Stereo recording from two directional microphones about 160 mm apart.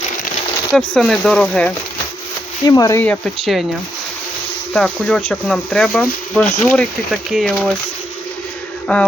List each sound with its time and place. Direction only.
0.7 s speech: 5° left (ahead or behind)
2.6 s speech: 20° left (ahead or behind)
3.0 s speech: 5° left (ahead or behind)
4.7 s speech: 5° left (ahead or behind)